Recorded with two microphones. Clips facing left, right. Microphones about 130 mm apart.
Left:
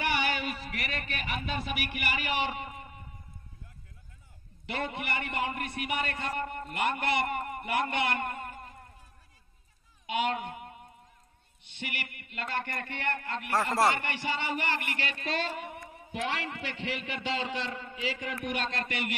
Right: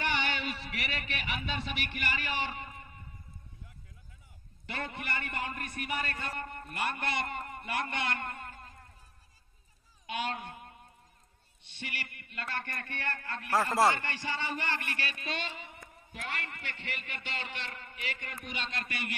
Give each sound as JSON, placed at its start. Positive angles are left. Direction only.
{"t": 0.0, "sound": "a sound", "side_deg": 10}
{"t": 2.0, "sound": "a man's voice", "side_deg": 15}
{"t": 4.6, "sound": "a man's voice", "side_deg": 15}
{"t": 6.4, "sound": "a man's voice", "side_deg": 65}
{"t": 6.7, "sound": "a man's voice", "side_deg": 15}
{"t": 10.1, "sound": "speech", "side_deg": 15}
{"t": 11.8, "sound": "a man's voice", "side_deg": 15}
{"t": 15.4, "sound": "a man's voice", "side_deg": 55}